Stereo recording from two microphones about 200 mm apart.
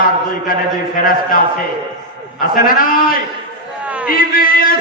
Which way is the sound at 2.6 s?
45° left (ahead or behind).